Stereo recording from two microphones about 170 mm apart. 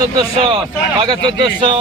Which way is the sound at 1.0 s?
25° right (ahead or behind).